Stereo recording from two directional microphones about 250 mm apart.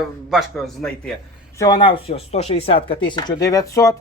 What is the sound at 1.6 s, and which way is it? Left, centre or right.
Speech, centre.